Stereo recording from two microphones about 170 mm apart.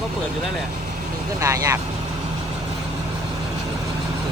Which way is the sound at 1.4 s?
15° right (ahead or behind).